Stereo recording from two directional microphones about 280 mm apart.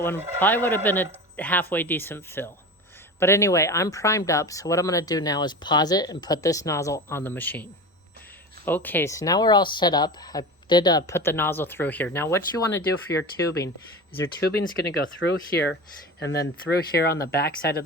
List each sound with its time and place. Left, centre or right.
0.0 s speech: centre
14.5 s speech: left